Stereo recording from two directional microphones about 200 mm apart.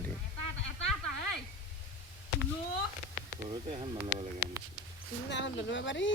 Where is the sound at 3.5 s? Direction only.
25° right (ahead or behind).